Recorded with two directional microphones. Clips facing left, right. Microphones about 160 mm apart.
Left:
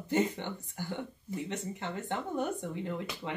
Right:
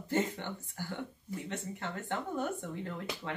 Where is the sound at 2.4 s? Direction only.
15° left (ahead or behind).